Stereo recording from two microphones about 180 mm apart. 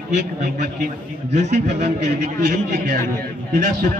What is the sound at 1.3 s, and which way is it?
A man's voice, 40° right (ahead or behind).